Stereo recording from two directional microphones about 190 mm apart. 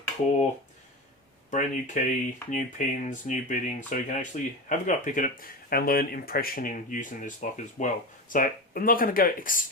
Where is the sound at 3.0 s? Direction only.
40° left (ahead or behind).